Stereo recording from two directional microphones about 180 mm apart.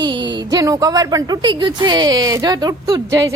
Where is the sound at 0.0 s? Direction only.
25° right (ahead or behind).